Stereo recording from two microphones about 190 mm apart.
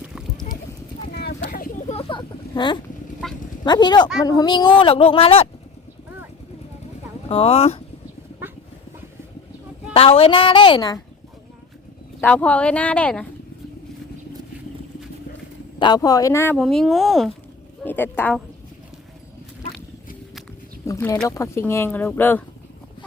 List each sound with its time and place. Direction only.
0.0 s a sound: 5° right (ahead or behind)
1.1 s clip-clop: 55° left (ahead or behind)
1.5 s a sound: 50° left (ahead or behind)
1.9 s a sound: 30° left (ahead or behind)
3.2 s speech: centre (ahead or behind)
3.6 s speech: 20° left (ahead or behind)
7.3 s speech: 30° left (ahead or behind)
9.9 s speech: 30° left (ahead or behind)
12.2 s speech: 5° left (ahead or behind)
15.8 s speech: 20° left (ahead or behind)
16.6 s speech: centre (ahead or behind)
20.8 s speech: 15° left (ahead or behind)